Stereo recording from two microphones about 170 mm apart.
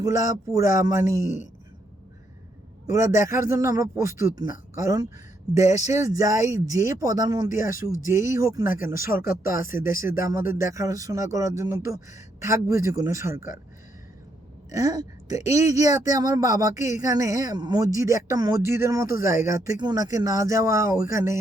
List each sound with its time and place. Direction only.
0.0 s speech: 20° right (ahead or behind)
2.9 s speech: 20° right (ahead or behind)
14.7 s speech: 20° right (ahead or behind)